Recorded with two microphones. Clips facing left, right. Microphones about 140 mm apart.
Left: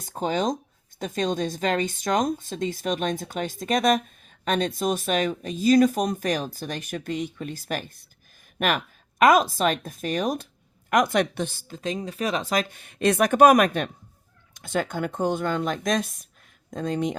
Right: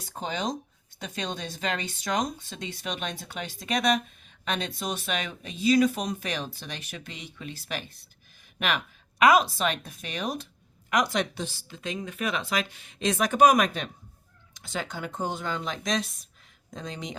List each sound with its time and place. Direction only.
0.0 s speech: 45° left (ahead or behind)
11.7 s speech: 35° left (ahead or behind)